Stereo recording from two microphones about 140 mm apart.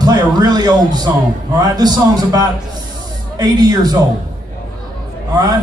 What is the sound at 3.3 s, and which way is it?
Speech, 30° right (ahead or behind).